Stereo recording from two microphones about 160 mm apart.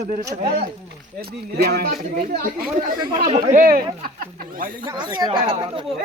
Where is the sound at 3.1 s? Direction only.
40° right (ahead or behind).